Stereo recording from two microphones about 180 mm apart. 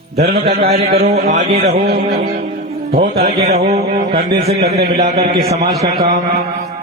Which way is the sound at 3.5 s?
35° right (ahead or behind).